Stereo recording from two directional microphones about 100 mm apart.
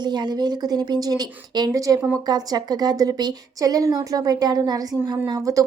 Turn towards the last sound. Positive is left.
turn(degrees=-35)  # may be behind; listen again after turning